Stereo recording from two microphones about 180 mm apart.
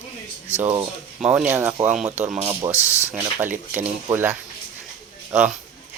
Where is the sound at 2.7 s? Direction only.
15° left (ahead or behind).